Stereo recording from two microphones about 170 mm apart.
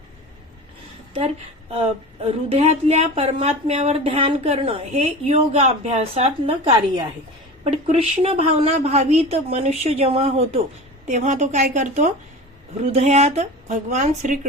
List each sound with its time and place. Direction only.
1.7 s a woman's voice: 35° right (ahead or behind)